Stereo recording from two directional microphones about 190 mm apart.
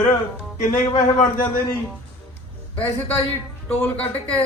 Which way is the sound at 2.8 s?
15° left (ahead or behind).